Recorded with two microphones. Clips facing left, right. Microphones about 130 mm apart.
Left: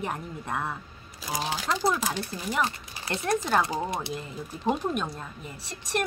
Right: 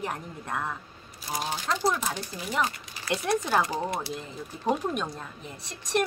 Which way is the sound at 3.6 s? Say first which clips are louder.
Even; 20° left (ahead or behind).